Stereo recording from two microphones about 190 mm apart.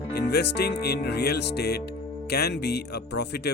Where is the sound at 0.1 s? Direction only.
60° left (ahead or behind).